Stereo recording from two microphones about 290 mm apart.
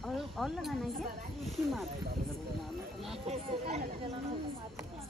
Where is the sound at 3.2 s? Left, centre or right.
Right.